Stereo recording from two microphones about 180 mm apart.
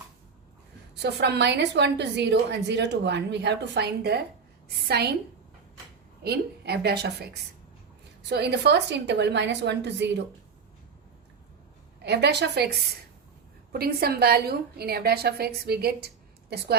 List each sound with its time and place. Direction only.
0.9 s a woman's voice: 70° right (ahead or behind)
6.2 s a woman's voice: 65° right (ahead or behind)
12.0 s a woman's voice: 65° right (ahead or behind)
13.7 s a woman's voice: 60° right (ahead or behind)